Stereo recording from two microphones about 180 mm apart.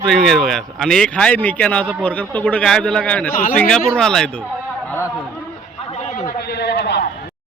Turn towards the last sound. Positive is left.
turn(degrees=70)  # may be behind; listen again after turning